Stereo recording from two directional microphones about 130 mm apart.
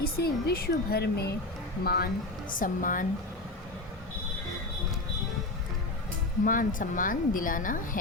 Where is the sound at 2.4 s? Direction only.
90° left.